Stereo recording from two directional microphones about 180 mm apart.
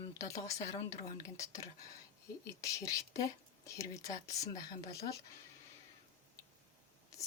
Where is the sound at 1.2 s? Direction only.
20° left (ahead or behind).